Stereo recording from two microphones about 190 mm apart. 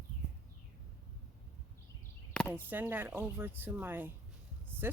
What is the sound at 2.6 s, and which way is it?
Speech, 10° right (ahead or behind).